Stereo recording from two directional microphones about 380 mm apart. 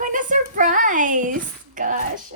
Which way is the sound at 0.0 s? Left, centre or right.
Right.